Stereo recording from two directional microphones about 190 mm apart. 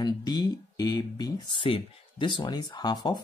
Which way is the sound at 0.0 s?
20° left (ahead or behind).